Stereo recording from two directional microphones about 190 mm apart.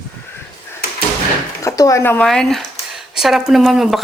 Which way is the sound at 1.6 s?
15° left (ahead or behind).